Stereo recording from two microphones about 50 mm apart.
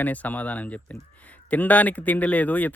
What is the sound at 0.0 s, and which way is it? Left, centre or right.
Speech, left.